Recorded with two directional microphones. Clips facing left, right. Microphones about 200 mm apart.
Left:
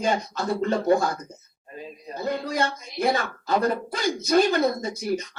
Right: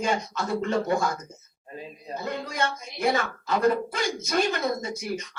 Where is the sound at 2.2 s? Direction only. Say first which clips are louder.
Left 4 dB; 35° left (ahead or behind).